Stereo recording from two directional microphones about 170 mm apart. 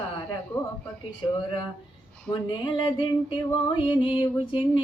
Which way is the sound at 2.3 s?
30° left (ahead or behind).